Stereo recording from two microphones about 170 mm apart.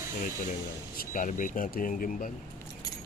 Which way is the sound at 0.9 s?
50° left (ahead or behind).